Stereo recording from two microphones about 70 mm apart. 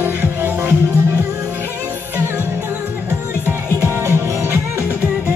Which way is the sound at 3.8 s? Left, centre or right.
Right.